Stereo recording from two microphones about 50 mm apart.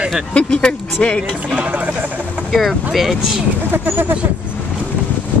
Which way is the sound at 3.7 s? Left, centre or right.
Right.